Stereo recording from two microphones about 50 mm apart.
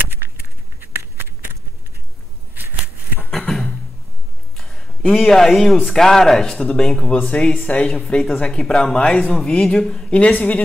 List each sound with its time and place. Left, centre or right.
0.1 s a sound: right
3.3 s beatboxing: centre
4.6 s a sound: centre
5.1 s a man's voice: centre
9.5 s speech: centre
10.1 s a woman's voice: left